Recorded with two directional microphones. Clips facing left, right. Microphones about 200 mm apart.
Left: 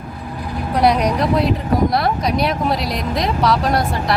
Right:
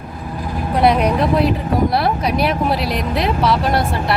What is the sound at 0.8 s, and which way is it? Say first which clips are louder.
Speech: right 1 dB; 5° right (ahead or behind).